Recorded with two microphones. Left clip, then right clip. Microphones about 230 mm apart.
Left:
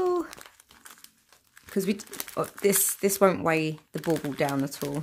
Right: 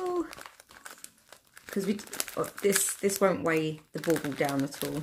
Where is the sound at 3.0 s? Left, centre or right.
Left.